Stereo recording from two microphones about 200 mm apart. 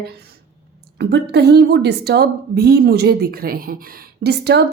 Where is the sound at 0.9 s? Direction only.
55° right (ahead or behind).